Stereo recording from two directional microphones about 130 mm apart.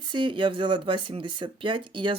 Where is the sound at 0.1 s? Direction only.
40° right (ahead or behind).